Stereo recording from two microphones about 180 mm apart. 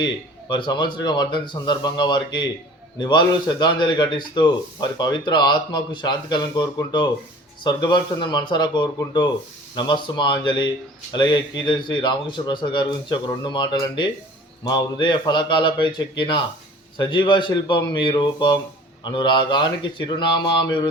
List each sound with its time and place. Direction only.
0.0 s a man's voice: 25° left (ahead or behind)